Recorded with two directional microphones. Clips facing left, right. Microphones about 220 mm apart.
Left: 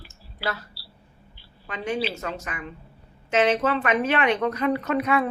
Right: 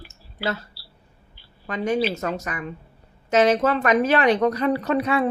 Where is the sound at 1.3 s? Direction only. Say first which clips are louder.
Right 7 dB; 45° right (ahead or behind).